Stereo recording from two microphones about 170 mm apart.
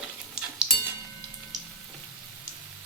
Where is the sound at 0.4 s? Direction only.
5° right (ahead or behind).